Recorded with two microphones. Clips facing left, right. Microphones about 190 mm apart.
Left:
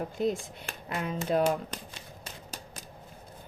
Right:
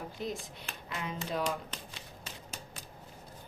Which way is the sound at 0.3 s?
50° left (ahead or behind).